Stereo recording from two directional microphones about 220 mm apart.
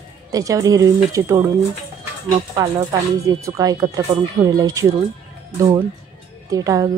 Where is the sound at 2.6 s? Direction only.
15° right (ahead or behind).